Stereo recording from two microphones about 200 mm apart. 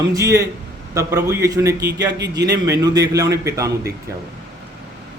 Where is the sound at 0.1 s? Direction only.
15° right (ahead or behind).